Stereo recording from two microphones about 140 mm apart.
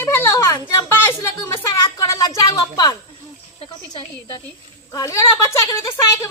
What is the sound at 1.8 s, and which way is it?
A woman's voice, 25° left (ahead or behind).